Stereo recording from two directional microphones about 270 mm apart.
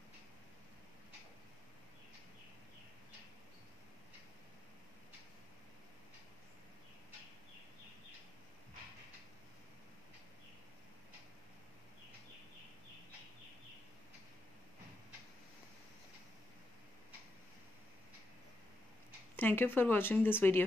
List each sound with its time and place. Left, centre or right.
19.3 s speech: centre